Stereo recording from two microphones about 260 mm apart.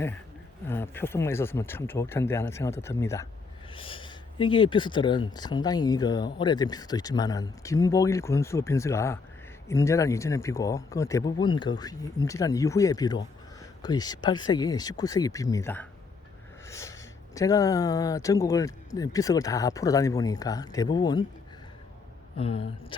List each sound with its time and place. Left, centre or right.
0.7 s speech: centre
22.4 s speech: left